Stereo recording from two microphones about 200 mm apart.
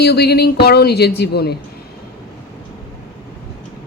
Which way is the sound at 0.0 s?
55° left (ahead or behind).